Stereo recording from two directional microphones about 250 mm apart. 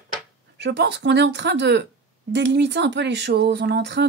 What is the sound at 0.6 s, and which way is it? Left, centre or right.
Speech, right.